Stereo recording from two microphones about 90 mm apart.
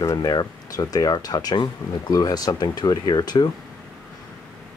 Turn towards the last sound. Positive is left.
turn(degrees=50)  # may be behind; listen again after turning